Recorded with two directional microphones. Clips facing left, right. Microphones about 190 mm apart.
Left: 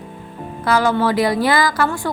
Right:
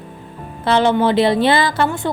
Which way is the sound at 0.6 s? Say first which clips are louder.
Right 2 dB; 25° right (ahead or behind).